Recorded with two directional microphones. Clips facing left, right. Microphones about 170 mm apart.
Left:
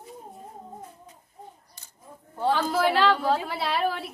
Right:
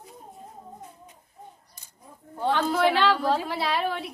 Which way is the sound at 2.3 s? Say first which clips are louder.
Even; 5° left (ahead or behind).